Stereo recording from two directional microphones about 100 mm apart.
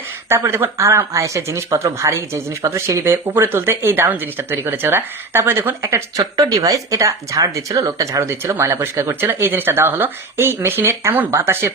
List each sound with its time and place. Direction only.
0.3 s speech: 25° right (ahead or behind)
8.2 s speech: 25° right (ahead or behind)